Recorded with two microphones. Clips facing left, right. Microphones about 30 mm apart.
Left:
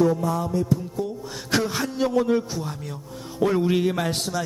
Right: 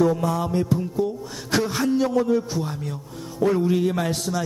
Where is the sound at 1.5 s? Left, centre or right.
Centre.